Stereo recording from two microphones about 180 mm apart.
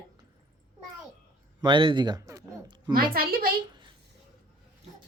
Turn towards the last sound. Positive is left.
turn(degrees=-55)  # may be behind; listen again after turning